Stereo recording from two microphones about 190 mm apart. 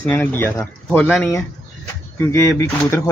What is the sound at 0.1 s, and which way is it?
Speech, 10° left (ahead or behind).